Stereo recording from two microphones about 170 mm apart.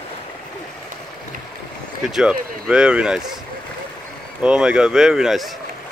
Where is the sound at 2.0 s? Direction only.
5° right (ahead or behind).